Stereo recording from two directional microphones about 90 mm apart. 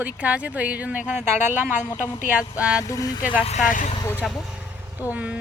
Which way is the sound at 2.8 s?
40° left (ahead or behind).